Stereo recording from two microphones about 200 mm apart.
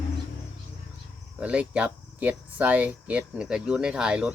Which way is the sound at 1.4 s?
5° right (ahead or behind).